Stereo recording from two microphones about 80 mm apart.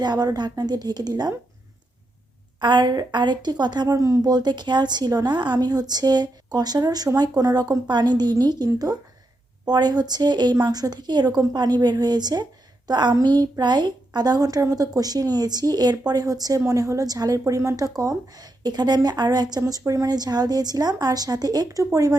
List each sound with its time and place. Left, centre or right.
0.0 s speech: right
2.6 s speech: right
3.9 s speech: right
4.2 s a woman's voice: right